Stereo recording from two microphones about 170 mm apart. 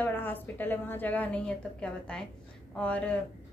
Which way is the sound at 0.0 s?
10° left (ahead or behind).